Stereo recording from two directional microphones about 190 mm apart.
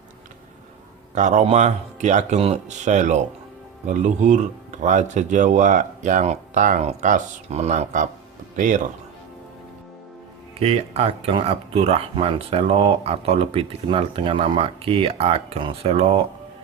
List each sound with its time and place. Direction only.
1.1 s speech: 40° right (ahead or behind)
10.6 s speech: 35° right (ahead or behind)